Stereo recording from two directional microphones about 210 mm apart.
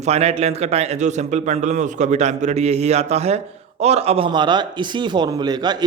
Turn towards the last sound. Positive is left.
turn(degrees=-20)  # may be behind; listen again after turning